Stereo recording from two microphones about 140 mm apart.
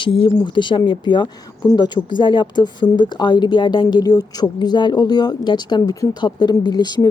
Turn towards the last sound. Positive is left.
turn(degrees=30)  # may be behind; listen again after turning